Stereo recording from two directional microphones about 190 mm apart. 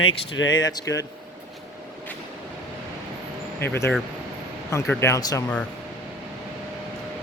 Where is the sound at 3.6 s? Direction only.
10° left (ahead or behind).